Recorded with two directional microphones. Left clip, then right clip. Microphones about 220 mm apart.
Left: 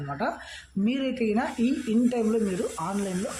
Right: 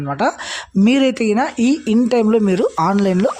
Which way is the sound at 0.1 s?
50° right (ahead or behind).